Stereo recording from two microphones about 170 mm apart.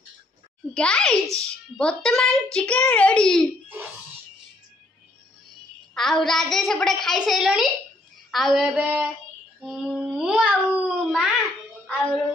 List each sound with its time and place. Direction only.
0.7 s a child's voice: 5° left (ahead or behind)
6.1 s a child's voice: centre (ahead or behind)
11.8 s music: 5° left (ahead or behind)